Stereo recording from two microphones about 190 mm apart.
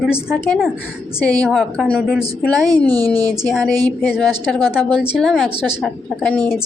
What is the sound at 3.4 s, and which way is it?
A woman's voice, 5° left (ahead or behind).